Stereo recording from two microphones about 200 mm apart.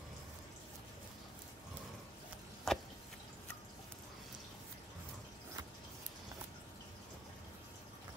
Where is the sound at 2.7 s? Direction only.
Centre (ahead or behind).